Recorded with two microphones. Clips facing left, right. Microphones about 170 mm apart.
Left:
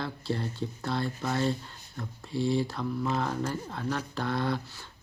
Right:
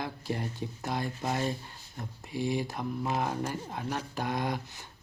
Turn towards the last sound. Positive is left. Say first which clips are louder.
# left 2 dB
turn(degrees=-15)  # may be behind; listen again after turning